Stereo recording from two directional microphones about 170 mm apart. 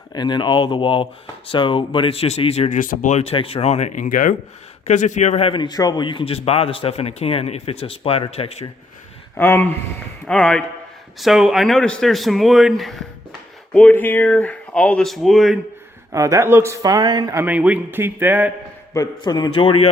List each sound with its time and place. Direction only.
0.1 s a man's voice: 25° left (ahead or behind)
9.4 s speech: 10° left (ahead or behind)
16.1 s speech: 20° right (ahead or behind)
17.4 s a man's voice: 10° right (ahead or behind)
18.9 s speech: 25° left (ahead or behind)